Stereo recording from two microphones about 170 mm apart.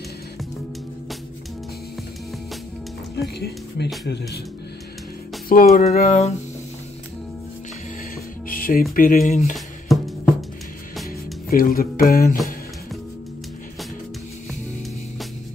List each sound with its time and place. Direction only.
3.2 s speech: 70° left (ahead or behind)
5.5 s speech: 55° left (ahead or behind)
5.9 s a sound: 40° left (ahead or behind)
8.5 s music: 55° left (ahead or behind)
8.9 s speech: 55° left (ahead or behind)
9.9 s music: centre (ahead or behind)
11.5 s speech: 55° left (ahead or behind)